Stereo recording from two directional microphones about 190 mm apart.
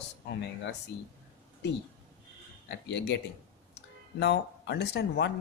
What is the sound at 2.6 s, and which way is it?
Speech, 65° left (ahead or behind).